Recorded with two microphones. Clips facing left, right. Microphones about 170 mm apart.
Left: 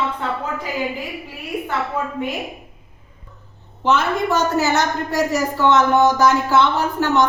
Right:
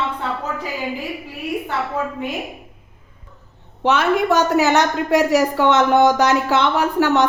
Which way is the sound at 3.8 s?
65° right (ahead or behind).